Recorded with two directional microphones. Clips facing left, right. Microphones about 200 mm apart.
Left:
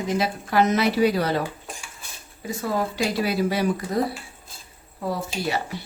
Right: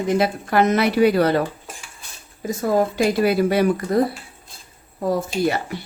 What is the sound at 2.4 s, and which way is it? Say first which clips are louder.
Speech: right 6 dB; 45° right (ahead or behind).